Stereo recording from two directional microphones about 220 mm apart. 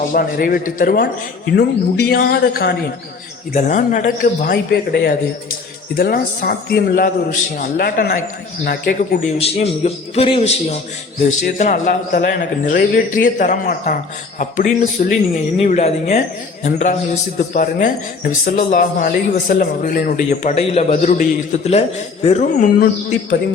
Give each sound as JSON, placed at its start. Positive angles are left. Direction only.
{"t": 0.1, "sound": "a man's voice", "side_deg": 40}